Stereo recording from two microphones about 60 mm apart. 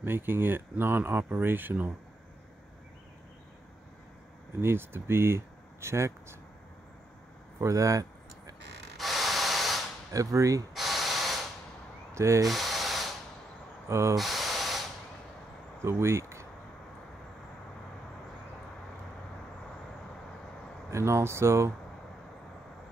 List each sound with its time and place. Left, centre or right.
0.0 s speech: right
4.6 s speech: right
7.6 s a sound: right
8.9 s spray: centre
10.1 s speech: right
10.7 s spray: centre
12.1 s speech: right
12.4 s spray: centre
13.8 s hiss: right
14.1 s hiss: centre
15.8 s speech: right
20.9 s speech: right